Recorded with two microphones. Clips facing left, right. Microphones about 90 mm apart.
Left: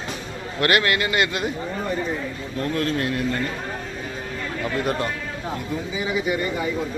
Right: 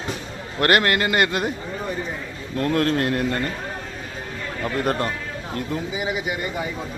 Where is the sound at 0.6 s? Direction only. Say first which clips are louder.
Right 2 dB; 45° right (ahead or behind).